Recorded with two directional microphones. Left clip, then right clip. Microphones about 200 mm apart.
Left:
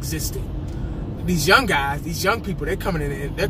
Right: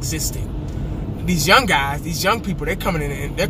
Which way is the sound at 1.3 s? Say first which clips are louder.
Right 2 dB; 20° right (ahead or behind).